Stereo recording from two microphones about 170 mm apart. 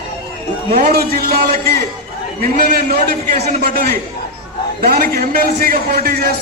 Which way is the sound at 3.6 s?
60° right (ahead or behind).